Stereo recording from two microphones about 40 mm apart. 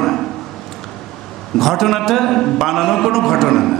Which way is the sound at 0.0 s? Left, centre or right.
Centre.